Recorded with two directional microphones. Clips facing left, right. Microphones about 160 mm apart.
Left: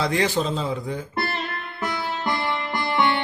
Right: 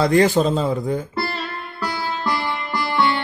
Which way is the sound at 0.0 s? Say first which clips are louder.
Right 7 dB; 50° right (ahead or behind).